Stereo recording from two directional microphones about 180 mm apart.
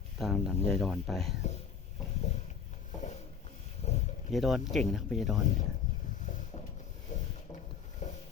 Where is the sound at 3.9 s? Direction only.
35° left (ahead or behind).